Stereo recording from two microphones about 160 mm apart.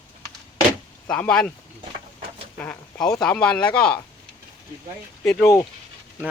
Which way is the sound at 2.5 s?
10° left (ahead or behind).